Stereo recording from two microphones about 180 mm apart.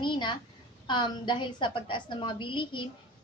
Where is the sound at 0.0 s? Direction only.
25° left (ahead or behind).